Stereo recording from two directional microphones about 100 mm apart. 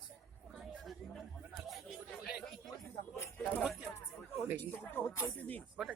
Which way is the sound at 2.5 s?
5° left (ahead or behind).